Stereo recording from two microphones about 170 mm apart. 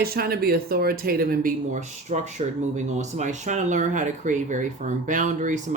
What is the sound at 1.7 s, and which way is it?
Speech, 40° right (ahead or behind).